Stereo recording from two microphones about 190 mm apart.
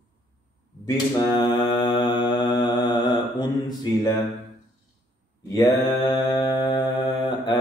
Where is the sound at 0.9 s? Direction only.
20° left (ahead or behind).